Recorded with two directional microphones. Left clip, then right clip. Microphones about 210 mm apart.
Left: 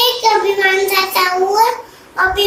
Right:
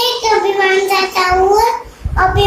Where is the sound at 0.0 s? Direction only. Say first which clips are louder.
Even; 15° right (ahead or behind).